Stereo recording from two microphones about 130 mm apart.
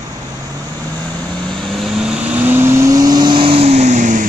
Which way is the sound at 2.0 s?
5° right (ahead or behind).